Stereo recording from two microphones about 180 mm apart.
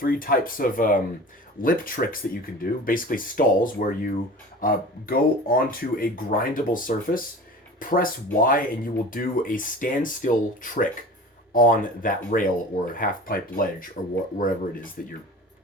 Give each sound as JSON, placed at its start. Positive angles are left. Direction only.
{"t": 0.0, "sound": "speech", "side_deg": 55}